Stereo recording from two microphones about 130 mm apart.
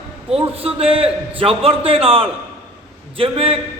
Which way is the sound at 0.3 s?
50° right (ahead or behind).